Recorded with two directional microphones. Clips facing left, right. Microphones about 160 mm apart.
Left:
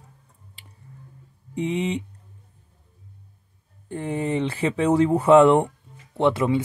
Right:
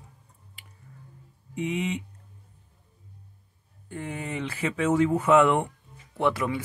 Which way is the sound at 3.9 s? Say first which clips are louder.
Left 8 dB; 30° left (ahead or behind).